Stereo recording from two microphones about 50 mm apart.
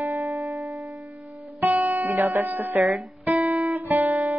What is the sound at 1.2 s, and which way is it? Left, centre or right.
Music, right.